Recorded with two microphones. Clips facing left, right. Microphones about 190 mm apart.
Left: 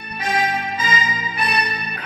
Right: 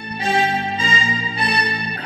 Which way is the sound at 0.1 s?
30° right (ahead or behind).